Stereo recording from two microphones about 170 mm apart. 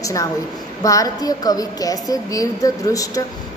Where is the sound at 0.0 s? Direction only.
20° left (ahead or behind).